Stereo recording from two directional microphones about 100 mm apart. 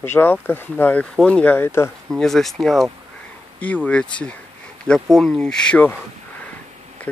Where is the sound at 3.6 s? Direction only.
15° left (ahead or behind).